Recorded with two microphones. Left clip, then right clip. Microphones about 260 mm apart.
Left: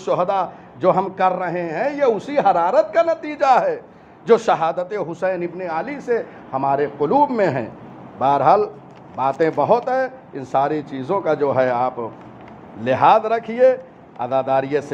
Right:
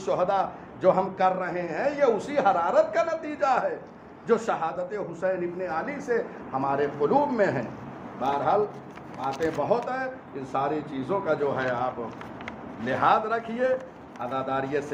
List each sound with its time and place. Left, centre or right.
0.0 s a man's voice: left
9.6 s a man's voice: left